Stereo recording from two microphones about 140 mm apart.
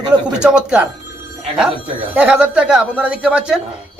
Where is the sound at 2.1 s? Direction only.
10° right (ahead or behind).